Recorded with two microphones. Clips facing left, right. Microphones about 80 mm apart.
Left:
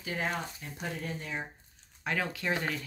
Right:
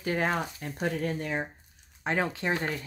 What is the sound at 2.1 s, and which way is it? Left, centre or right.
Speech, right.